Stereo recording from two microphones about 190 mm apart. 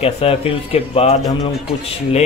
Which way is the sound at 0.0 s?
30° left (ahead or behind).